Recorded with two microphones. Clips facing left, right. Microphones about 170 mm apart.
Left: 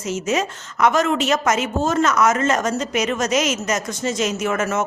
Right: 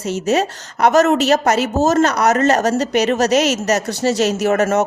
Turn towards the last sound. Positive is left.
turn(degrees=-40)  # may be behind; listen again after turning